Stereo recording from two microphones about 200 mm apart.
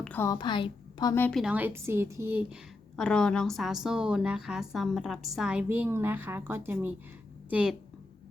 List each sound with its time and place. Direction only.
0.0 s a sound: 10° left (ahead or behind)
0.3 s a woman's voice: 25° left (ahead or behind)
1.4 s a woman's voice: 5° right (ahead or behind)
2.9 s a woman's voice: 5° left (ahead or behind)